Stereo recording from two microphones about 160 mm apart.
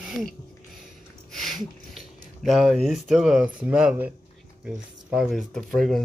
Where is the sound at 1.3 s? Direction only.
Centre (ahead or behind).